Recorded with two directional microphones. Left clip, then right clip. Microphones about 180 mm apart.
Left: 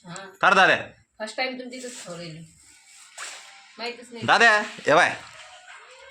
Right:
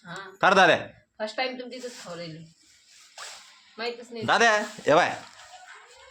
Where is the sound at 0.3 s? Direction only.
20° right (ahead or behind).